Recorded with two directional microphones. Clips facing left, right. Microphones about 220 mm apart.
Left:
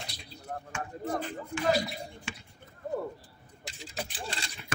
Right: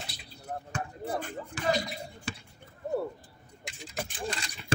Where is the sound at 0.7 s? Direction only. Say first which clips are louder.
Left 1 dB; 35° right (ahead or behind).